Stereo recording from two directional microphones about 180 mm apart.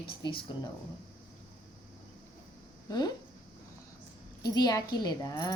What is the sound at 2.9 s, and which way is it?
Speech, 20° left (ahead or behind).